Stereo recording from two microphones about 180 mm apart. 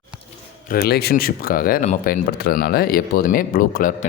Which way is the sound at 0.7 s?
60° left (ahead or behind).